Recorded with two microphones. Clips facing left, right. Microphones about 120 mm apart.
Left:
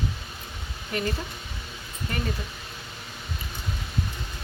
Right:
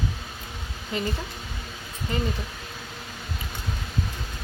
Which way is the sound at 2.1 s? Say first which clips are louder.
Right 4 dB; 20° right (ahead or behind).